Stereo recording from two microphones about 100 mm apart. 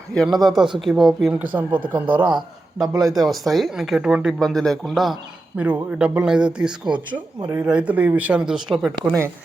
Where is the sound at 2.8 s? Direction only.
40° right (ahead or behind).